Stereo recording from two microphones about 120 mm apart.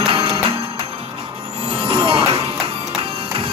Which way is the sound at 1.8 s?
50° right (ahead or behind).